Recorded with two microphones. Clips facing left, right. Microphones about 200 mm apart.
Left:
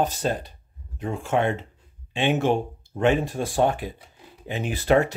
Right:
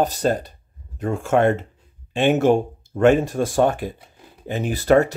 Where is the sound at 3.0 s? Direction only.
45° right (ahead or behind).